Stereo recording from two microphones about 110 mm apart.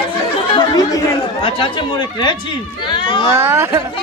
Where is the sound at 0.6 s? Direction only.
35° left (ahead or behind).